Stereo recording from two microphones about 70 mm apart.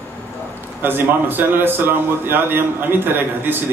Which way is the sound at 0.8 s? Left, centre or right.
Right.